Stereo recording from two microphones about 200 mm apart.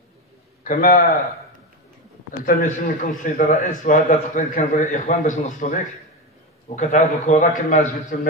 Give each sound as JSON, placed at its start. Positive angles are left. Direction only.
{"t": 0.7, "sound": "a man's voice", "side_deg": 45}
{"t": 2.4, "sound": "a man's voice", "side_deg": 40}